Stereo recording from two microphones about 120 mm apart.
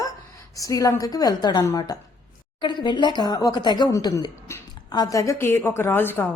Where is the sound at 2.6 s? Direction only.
40° left (ahead or behind).